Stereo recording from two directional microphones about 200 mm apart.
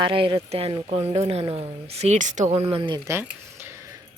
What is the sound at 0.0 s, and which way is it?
Speech, 25° right (ahead or behind).